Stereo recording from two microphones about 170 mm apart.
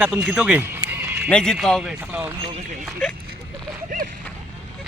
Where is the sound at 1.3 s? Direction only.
5° left (ahead or behind).